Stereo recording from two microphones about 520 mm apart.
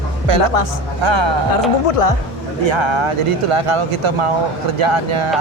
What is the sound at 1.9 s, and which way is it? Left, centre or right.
Speech, left.